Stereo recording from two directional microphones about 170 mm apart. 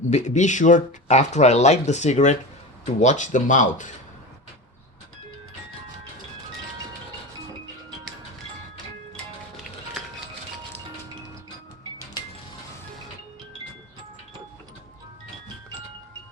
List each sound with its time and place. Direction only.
0.1 s speech: 45° left (ahead or behind)